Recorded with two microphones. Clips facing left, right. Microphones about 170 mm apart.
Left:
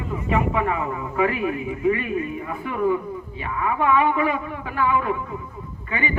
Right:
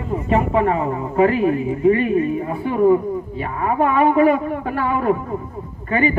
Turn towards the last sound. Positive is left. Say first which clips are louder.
# right 8 dB
turn(degrees=-40)  # may be behind; listen again after turning